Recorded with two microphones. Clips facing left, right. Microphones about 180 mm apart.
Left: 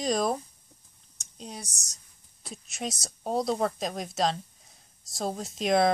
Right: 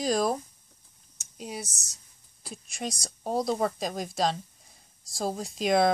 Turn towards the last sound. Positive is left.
turn(degrees=0)  # may be behind; listen again after turning